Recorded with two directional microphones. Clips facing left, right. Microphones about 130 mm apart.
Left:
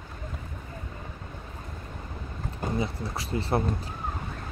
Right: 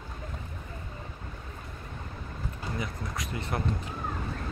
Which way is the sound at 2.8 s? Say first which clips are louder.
Left 3 dB; 30° left (ahead or behind).